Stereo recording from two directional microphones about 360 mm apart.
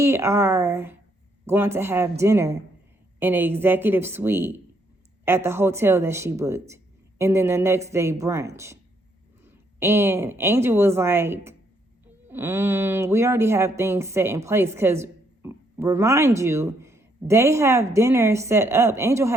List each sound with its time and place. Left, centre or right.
0.0 s a woman's voice: centre